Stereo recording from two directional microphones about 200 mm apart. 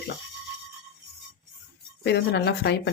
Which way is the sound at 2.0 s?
55° left (ahead or behind).